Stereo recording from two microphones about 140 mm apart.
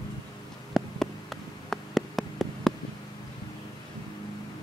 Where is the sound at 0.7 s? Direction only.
Centre (ahead or behind).